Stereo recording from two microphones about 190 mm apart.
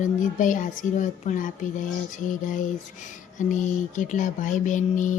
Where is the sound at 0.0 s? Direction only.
40° left (ahead or behind).